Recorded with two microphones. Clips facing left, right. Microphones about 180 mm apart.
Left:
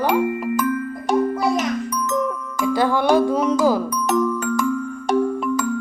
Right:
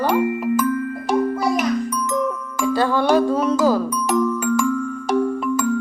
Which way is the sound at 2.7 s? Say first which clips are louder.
Even; 15° left (ahead or behind).